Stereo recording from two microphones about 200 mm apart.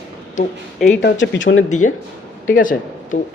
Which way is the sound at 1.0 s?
65° left (ahead or behind).